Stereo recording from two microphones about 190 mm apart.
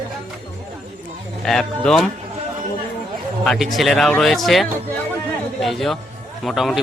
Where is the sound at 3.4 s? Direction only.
Centre (ahead or behind).